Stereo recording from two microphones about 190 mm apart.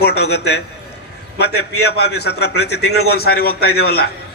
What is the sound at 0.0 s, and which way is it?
Speech, 60° left (ahead or behind).